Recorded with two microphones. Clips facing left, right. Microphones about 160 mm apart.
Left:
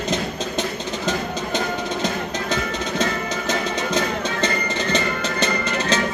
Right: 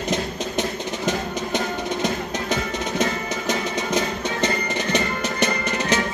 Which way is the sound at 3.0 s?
20° right (ahead or behind).